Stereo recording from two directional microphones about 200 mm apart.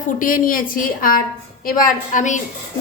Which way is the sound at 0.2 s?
45° left (ahead or behind).